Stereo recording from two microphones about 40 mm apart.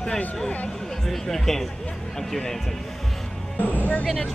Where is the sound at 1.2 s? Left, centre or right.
Centre.